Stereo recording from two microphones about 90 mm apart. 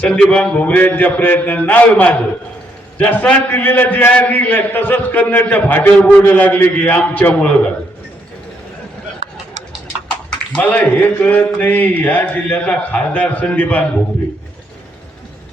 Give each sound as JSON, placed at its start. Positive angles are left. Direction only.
{"t": 0.0, "sound": "a man's voice", "side_deg": 15}
{"t": 10.5, "sound": "a man's voice", "side_deg": 15}